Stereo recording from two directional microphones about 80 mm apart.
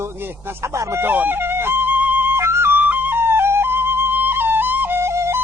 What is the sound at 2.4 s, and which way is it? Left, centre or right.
Flute, right.